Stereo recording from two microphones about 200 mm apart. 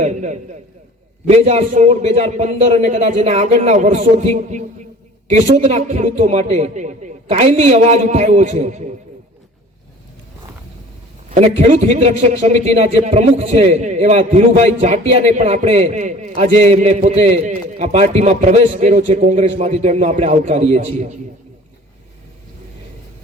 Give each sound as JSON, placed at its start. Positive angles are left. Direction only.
{"t": 0.0, "sound": "a man's voice", "side_deg": -35}
{"t": 11.3, "sound": "a man's voice", "side_deg": -35}